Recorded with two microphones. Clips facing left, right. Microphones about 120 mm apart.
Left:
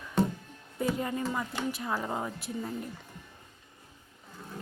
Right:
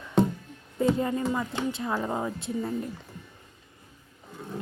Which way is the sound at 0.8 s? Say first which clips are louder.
Right 6 dB; 30° right (ahead or behind).